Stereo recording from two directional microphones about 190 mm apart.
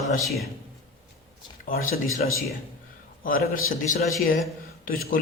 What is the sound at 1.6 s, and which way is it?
Speech, 45° left (ahead or behind).